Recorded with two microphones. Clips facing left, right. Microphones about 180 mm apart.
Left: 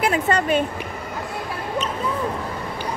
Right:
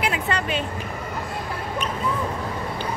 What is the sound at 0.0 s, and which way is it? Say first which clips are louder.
Speech: left 5 dB; 45° left (ahead or behind).